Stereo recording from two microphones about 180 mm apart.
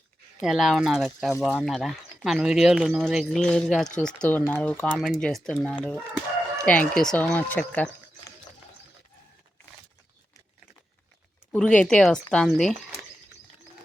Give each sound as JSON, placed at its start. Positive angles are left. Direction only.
{"t": 0.4, "sound": "speech", "side_deg": 0}
{"t": 11.5, "sound": "speech", "side_deg": 5}